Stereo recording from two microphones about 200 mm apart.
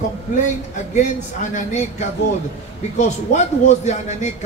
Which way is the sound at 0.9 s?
35° left (ahead or behind).